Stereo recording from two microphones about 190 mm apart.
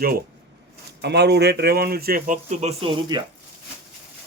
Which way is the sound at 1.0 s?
60° right (ahead or behind).